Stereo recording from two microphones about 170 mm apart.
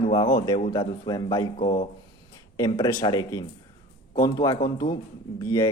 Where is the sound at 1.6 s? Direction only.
35° left (ahead or behind).